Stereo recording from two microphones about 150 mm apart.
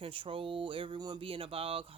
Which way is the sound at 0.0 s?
35° right (ahead or behind).